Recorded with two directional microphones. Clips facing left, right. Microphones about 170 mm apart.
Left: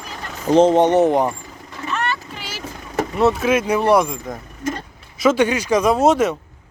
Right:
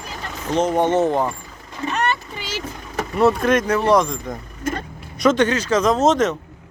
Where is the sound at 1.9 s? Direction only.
20° right (ahead or behind).